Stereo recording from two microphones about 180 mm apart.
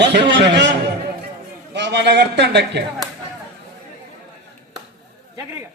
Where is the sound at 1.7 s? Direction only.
70° right (ahead or behind).